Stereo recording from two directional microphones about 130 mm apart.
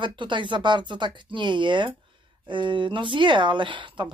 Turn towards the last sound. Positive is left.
turn(degrees=-40)  # may be behind; listen again after turning